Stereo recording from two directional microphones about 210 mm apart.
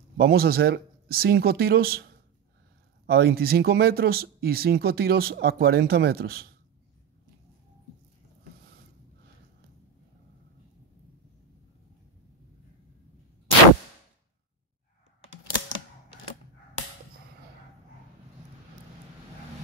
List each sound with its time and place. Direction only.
0.2 s speech: 45° right (ahead or behind)
3.1 s speech: 45° right (ahead or behind)